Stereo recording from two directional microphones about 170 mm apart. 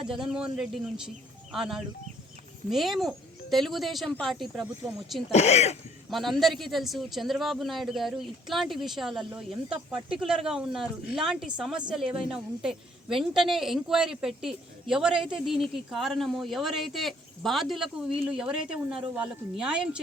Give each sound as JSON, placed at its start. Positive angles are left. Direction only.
{"t": 0.0, "sound": "a woman's voice", "side_deg": 0}
{"t": 5.3, "sound": "speech", "side_deg": 40}
{"t": 6.1, "sound": "a woman's voice", "side_deg": 0}